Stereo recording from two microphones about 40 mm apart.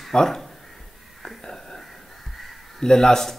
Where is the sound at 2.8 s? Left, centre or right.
Centre.